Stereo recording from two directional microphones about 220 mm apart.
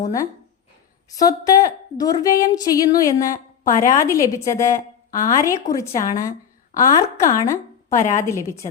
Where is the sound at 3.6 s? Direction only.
35° left (ahead or behind).